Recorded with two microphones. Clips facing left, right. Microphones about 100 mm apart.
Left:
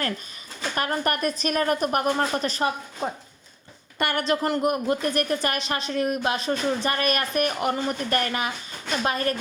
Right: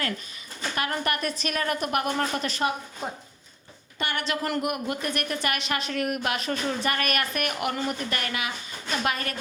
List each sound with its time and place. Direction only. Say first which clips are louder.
0.8 s a woman's voice: left 3 dB; 40° left (ahead or behind)
3.9 s a woman's voice: left 5 dB; 50° left (ahead or behind)